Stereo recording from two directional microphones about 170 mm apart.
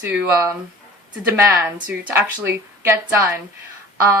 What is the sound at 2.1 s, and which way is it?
Speech, 15° right (ahead or behind).